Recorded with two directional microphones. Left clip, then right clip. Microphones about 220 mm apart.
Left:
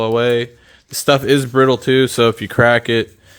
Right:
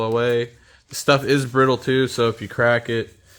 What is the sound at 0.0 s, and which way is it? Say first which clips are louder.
Speech: left 5 dB; 25° left (ahead or behind).